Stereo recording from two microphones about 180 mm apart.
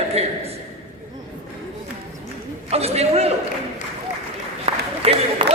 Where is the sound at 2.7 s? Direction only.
35° right (ahead or behind).